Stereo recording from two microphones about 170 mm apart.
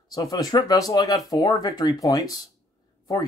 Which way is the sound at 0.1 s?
20° left (ahead or behind).